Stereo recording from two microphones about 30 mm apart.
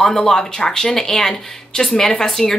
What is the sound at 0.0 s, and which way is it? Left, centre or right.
A woman's voice, centre.